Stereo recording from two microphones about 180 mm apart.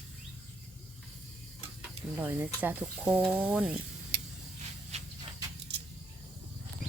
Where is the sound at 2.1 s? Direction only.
10° right (ahead or behind).